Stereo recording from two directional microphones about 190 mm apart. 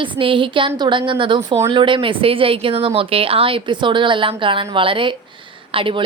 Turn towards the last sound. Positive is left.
turn(degrees=-25)  # may be behind; listen again after turning